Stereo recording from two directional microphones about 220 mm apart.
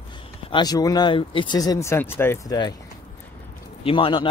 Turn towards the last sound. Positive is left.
turn(degrees=25)  # may be behind; listen again after turning